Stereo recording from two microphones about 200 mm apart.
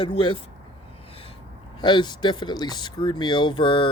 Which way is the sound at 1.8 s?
25° left (ahead or behind).